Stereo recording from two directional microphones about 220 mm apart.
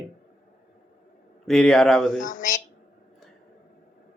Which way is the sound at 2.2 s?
35° left (ahead or behind).